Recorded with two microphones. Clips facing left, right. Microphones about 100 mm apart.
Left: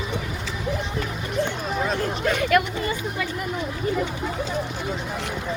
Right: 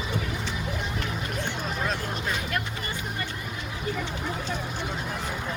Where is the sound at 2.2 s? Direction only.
70° left (ahead or behind).